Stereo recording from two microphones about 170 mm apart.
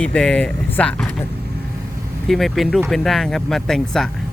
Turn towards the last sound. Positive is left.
turn(degrees=0)  # may be behind; listen again after turning